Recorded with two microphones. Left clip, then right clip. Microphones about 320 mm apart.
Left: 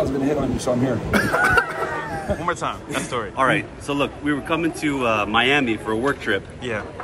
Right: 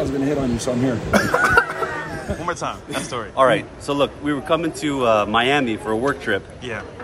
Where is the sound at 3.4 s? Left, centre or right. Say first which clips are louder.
Right 4 dB; right.